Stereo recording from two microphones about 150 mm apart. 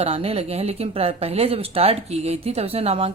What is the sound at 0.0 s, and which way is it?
Speech, 40° right (ahead or behind).